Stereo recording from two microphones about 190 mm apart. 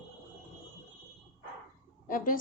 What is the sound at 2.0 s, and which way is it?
Speech, 45° left (ahead or behind).